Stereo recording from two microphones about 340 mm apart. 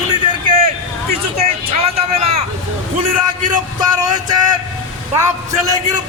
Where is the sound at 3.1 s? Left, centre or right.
Centre.